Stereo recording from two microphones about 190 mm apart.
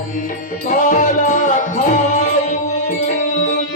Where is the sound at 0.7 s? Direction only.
40° left (ahead or behind).